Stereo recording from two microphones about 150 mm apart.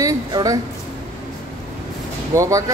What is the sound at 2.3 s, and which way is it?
Speech, 20° right (ahead or behind).